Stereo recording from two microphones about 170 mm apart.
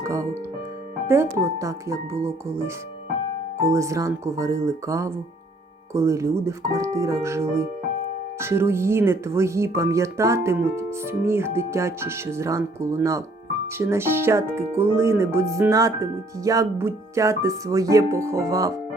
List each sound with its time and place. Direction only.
0.0 s piano: 15° right (ahead or behind)
1.0 s speech: 15° right (ahead or behind)
3.7 s speech: 15° right (ahead or behind)